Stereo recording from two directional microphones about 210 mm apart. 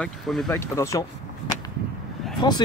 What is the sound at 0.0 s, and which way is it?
Speech, centre (ahead or behind).